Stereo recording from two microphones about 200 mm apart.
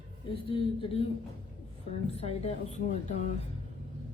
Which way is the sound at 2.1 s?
30° left (ahead or behind).